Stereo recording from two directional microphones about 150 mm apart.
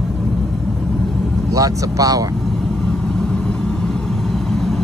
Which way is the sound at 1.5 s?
25° right (ahead or behind).